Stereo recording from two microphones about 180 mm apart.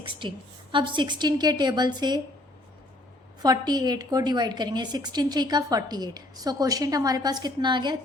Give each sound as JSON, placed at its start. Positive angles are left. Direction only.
{"t": 0.0, "sound": "a woman's voice", "side_deg": -25}
{"t": 3.4, "sound": "a woman's voice", "side_deg": -20}